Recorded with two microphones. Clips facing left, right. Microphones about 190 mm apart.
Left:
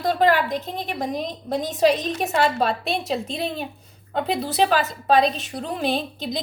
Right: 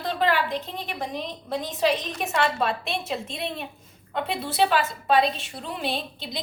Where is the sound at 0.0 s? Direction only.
40° left (ahead or behind).